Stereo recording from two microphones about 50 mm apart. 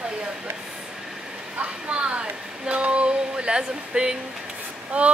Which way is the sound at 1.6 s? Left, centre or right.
Right.